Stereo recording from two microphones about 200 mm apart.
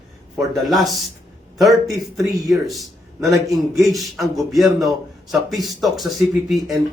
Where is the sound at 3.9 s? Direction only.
Centre (ahead or behind).